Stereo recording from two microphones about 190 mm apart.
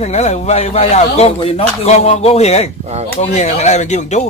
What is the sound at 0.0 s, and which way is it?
Speech, 35° left (ahead or behind).